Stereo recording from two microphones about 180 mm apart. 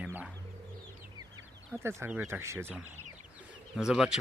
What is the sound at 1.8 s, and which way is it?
Speech, 15° right (ahead or behind).